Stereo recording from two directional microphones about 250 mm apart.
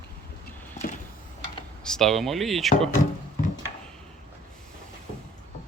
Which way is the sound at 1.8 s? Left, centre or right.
Centre.